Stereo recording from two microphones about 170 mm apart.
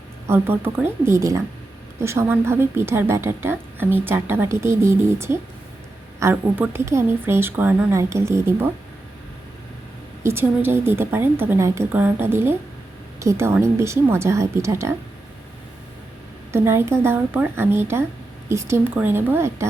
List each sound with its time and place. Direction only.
0.3 s a woman's voice: 10° right (ahead or behind)
10.2 s a woman's voice: 15° right (ahead or behind)
16.5 s a woman's voice: 15° right (ahead or behind)